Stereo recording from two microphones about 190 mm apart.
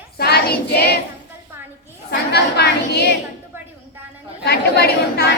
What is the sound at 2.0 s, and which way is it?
Speech, 60° left (ahead or behind).